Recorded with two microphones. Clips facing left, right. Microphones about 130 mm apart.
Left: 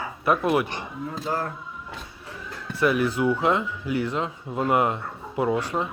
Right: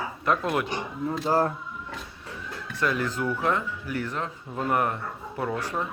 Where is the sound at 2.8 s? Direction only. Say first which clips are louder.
Left 5 dB; 15° left (ahead or behind).